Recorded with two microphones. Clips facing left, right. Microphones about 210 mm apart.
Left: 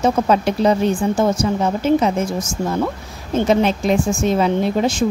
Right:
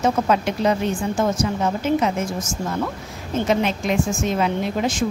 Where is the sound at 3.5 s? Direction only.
35° left (ahead or behind).